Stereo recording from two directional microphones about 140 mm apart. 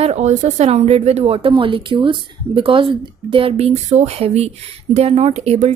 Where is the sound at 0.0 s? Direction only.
55° right (ahead or behind).